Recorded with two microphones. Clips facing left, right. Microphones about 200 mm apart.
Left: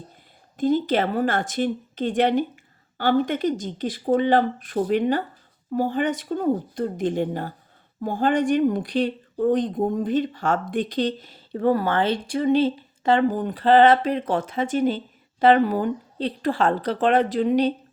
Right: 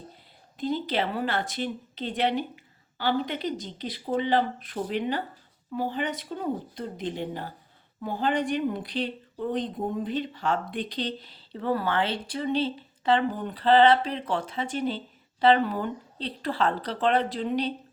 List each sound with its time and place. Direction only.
0.5 s speech: 45° left (ahead or behind)